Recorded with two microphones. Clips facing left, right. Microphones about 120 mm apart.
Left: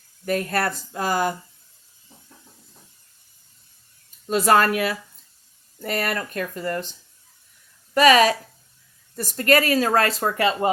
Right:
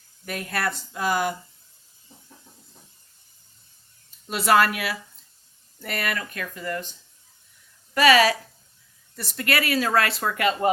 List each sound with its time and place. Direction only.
0.3 s speech: 40° left (ahead or behind)
4.3 s speech: 40° left (ahead or behind)
7.9 s speech: 40° left (ahead or behind)